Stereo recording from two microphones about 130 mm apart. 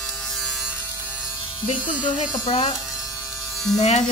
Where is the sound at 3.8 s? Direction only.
60° left (ahead or behind).